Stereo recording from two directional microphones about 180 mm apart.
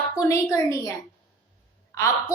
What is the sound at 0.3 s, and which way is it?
Speech, 15° left (ahead or behind).